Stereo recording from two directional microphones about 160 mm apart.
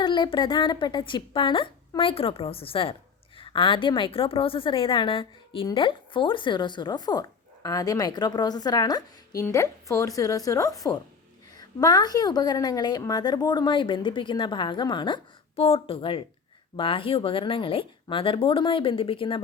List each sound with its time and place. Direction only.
0.0 s a woman's voice: 30° left (ahead or behind)